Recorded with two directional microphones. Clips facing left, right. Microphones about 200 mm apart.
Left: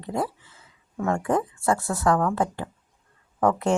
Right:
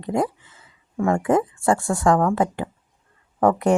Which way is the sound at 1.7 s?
50° right (ahead or behind).